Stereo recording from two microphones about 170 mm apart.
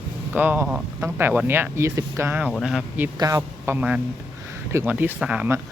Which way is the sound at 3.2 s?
20° right (ahead or behind).